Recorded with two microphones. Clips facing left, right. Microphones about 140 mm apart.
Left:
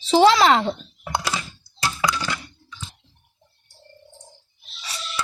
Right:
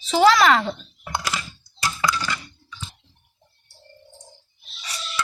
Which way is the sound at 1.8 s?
15° left (ahead or behind).